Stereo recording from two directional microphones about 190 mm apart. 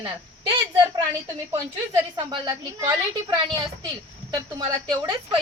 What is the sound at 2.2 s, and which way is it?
A woman's voice, 20° right (ahead or behind).